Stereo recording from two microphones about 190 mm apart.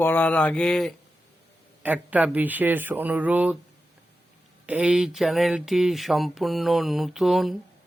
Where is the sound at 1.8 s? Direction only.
10° right (ahead or behind).